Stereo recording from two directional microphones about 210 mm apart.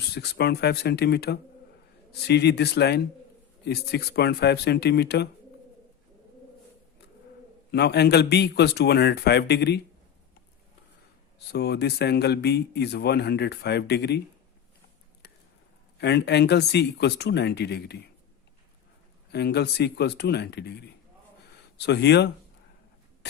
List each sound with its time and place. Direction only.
0.1 s speech: 50° left (ahead or behind)
7.7 s speech: 50° left (ahead or behind)
11.5 s speech: 50° left (ahead or behind)
16.0 s speech: 55° left (ahead or behind)
19.3 s speech: 50° left (ahead or behind)
21.8 s speech: 55° left (ahead or behind)